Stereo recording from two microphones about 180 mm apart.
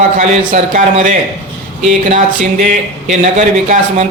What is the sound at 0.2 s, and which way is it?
Speech, 45° right (ahead or behind).